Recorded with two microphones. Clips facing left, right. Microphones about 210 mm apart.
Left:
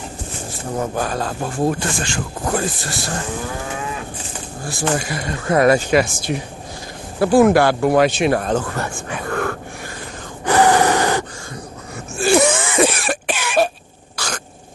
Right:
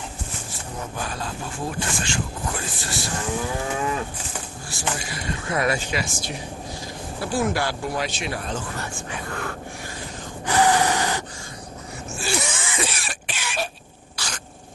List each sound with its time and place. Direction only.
0.7 s speech: 50° left (ahead or behind)
4.6 s speech: 50° left (ahead or behind)
10.4 s gasp: 60° left (ahead or behind)
12.2 s cough: 55° left (ahead or behind)
14.1 s cough: 50° left (ahead or behind)